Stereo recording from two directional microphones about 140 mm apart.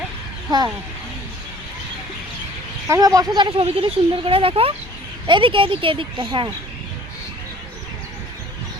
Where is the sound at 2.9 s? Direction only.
25° right (ahead or behind).